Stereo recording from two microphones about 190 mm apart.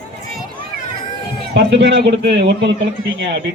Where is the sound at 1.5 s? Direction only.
65° right (ahead or behind).